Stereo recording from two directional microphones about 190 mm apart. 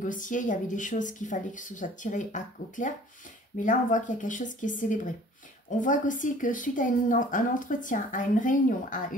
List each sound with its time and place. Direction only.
0.0 s a woman's voice: 45° left (ahead or behind)